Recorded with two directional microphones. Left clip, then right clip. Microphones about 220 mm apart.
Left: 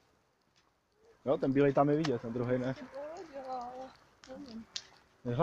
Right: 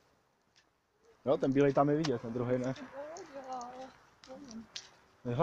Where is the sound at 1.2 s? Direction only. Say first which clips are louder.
Even; 10° right (ahead or behind).